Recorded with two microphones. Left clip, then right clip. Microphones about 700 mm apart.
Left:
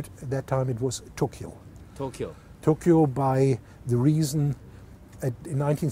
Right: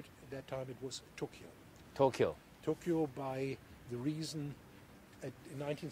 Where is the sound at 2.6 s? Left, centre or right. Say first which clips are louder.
Left 15 dB; left.